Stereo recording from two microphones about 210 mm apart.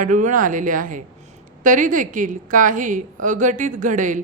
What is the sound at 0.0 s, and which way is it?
Speech, 35° right (ahead or behind).